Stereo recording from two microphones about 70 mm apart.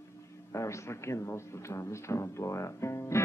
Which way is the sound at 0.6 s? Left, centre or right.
Left.